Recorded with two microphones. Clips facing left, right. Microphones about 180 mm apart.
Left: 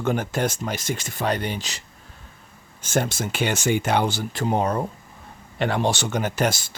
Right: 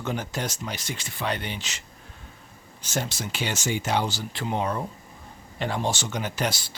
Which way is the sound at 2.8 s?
50° left (ahead or behind).